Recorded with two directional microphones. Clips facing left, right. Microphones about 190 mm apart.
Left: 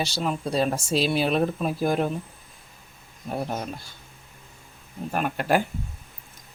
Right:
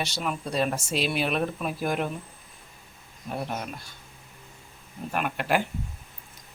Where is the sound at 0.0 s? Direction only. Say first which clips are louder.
Left 4 dB; 30° left (ahead or behind).